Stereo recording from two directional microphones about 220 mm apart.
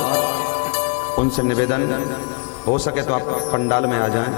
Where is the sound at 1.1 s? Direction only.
20° left (ahead or behind).